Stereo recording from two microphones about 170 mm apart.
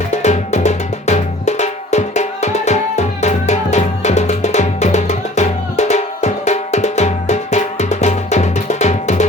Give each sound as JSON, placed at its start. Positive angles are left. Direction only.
{"t": 0.1, "sound": "music", "side_deg": 45}